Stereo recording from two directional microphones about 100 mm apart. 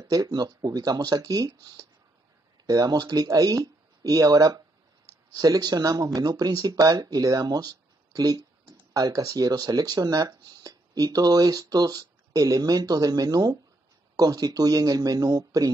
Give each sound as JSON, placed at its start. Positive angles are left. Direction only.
{"t": 0.0, "sound": "speech", "side_deg": -40}